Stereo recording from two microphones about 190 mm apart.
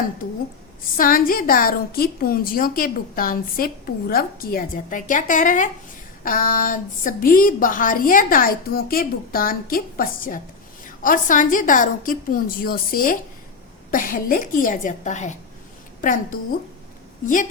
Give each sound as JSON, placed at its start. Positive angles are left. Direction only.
{"t": 0.9, "sound": "a woman's voice", "side_deg": 50}